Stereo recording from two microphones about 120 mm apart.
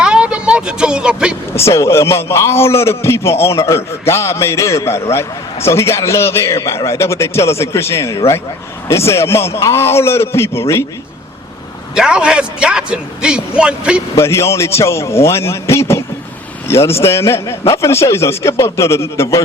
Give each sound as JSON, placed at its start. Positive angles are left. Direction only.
{"t": 0.0, "sound": "vehicle", "side_deg": -5}
{"t": 1.5, "sound": "a man's voice", "side_deg": 25}
{"t": 11.9, "sound": "a man's voice", "side_deg": -5}
{"t": 14.2, "sound": "a man's voice", "side_deg": 25}